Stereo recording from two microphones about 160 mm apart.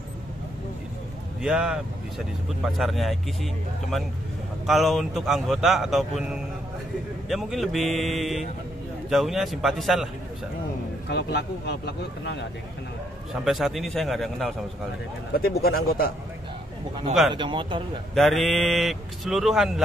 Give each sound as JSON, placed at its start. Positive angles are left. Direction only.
{"t": 1.4, "sound": "speech", "side_deg": -5}
{"t": 4.6, "sound": "speech", "side_deg": 0}
{"t": 7.2, "sound": "speech", "side_deg": 0}
{"t": 11.1, "sound": "speech", "side_deg": 90}
{"t": 13.3, "sound": "speech", "side_deg": 0}
{"t": 15.3, "sound": "speech", "side_deg": 70}
{"t": 17.3, "sound": "speech", "side_deg": -30}
{"t": 18.1, "sound": "speech", "side_deg": 0}